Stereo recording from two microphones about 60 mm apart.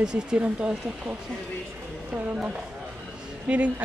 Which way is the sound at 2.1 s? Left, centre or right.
Centre.